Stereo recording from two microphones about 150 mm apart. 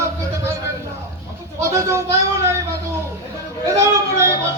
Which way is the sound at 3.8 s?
20° right (ahead or behind).